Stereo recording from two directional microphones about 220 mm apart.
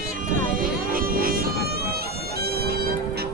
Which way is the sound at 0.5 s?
40° right (ahead or behind).